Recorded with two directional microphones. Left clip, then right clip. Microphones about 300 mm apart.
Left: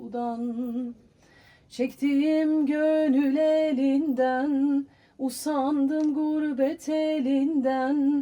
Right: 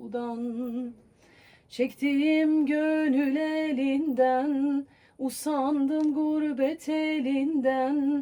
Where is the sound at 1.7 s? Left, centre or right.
Left.